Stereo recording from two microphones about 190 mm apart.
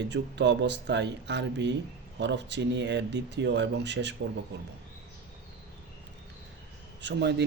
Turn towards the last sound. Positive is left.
turn(degrees=-65)  # may be behind; listen again after turning